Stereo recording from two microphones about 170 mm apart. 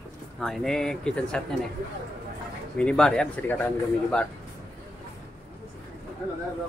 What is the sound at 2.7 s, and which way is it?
Speech, 5° left (ahead or behind).